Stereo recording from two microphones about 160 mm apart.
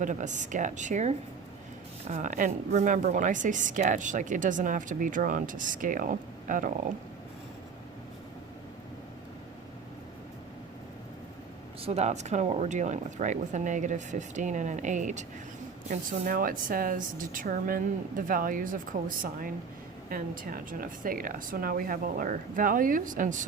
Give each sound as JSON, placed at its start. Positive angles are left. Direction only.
{"t": 0.0, "sound": "a woman's voice", "side_deg": -50}
{"t": 11.8, "sound": "a woman's voice", "side_deg": -40}
{"t": 15.9, "sound": "speech", "side_deg": -60}